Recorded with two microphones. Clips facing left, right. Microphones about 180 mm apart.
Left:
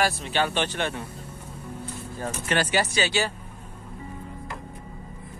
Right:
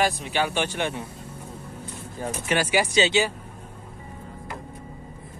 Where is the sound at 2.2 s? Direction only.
10° right (ahead or behind).